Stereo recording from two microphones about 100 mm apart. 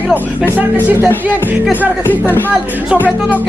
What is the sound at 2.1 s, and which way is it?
Speech, 20° left (ahead or behind).